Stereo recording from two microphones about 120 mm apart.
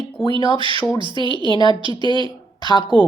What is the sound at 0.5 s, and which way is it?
A woman's voice, 45° right (ahead or behind).